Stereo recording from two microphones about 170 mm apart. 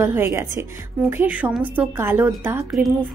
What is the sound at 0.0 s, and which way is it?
A woman's voice, 15° right (ahead or behind).